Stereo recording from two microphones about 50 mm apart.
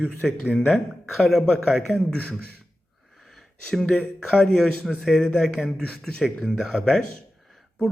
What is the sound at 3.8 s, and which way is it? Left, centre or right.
Speech, centre.